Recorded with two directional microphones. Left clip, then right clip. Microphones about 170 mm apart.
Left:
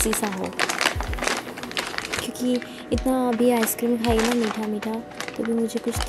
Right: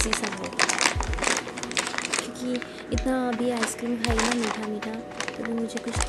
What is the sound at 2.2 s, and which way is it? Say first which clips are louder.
Speech: left 5 dB; 25° left (ahead or behind).